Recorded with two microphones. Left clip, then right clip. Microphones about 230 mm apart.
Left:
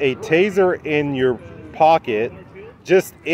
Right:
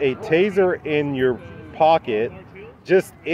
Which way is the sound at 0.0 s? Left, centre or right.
Centre.